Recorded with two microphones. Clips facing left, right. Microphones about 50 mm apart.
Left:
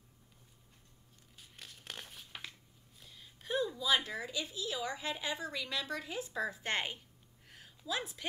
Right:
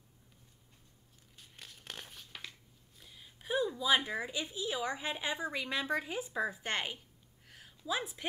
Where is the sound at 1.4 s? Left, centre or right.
Centre.